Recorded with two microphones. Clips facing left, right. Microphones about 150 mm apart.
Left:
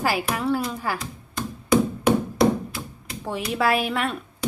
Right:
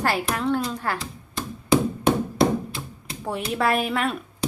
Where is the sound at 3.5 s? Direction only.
Centre (ahead or behind).